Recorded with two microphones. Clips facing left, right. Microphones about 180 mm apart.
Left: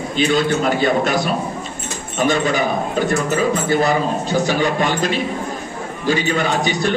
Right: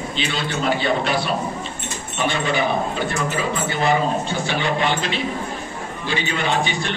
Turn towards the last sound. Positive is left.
turn(degrees=40)  # may be behind; listen again after turning